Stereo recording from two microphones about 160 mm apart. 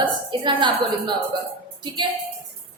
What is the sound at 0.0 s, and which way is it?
A woman's voice, 30° right (ahead or behind).